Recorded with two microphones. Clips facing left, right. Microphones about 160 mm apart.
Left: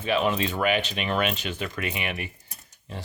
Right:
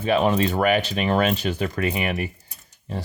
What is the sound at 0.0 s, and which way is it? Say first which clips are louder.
Speech: right 5 dB; 40° right (ahead or behind).